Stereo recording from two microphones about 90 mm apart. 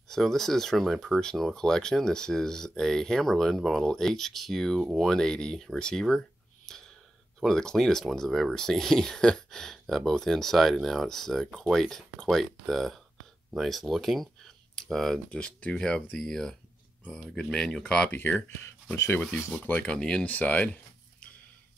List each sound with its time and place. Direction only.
0.1 s speech: 5° left (ahead or behind)